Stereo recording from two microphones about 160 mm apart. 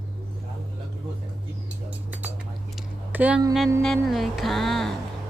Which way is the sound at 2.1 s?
10° right (ahead or behind).